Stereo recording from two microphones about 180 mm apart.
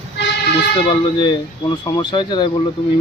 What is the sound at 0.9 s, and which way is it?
Speech, 25° left (ahead or behind).